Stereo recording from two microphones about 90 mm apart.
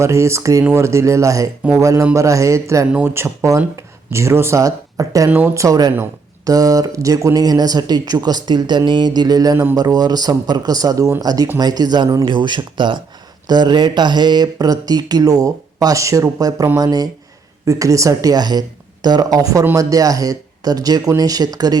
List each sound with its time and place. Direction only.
0.0 s speech: 30° right (ahead or behind); by 12.0 s 50° right (ahead or behind)
12.2 s speech: 60° right (ahead or behind)